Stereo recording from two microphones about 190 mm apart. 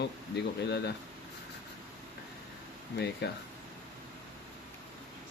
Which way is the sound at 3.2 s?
65° left (ahead or behind).